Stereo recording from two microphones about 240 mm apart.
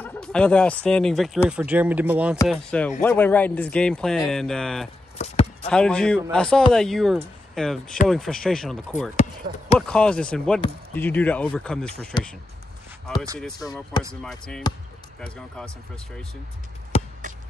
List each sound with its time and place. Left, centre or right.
0.0 s speech: centre
5.1 s chop: left
5.7 s speech: centre
9.1 s speech: left
9.8 s speech: centre
14.2 s speech: centre
16.9 s a sound: left